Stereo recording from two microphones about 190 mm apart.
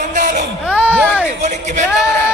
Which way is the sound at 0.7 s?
10° right (ahead or behind).